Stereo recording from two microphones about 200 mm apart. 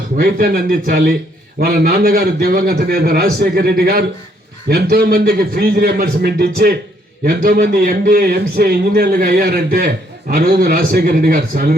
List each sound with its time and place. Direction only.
0.2 s a man's voice: 45° right (ahead or behind)